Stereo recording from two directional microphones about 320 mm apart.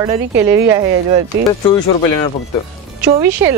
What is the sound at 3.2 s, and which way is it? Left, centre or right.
Speech, centre.